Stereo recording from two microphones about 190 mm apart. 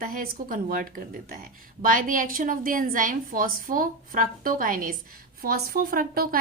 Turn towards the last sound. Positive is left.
turn(degrees=-50)  # may be behind; listen again after turning